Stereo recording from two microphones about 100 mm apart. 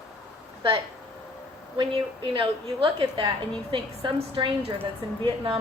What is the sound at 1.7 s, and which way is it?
A woman's voice, 60° right (ahead or behind).